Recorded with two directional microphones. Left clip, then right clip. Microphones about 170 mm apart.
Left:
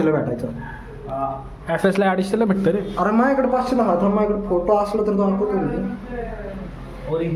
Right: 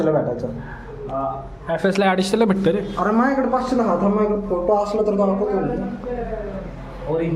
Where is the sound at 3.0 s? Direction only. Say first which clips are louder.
Left 1 dB; 10° left (ahead or behind).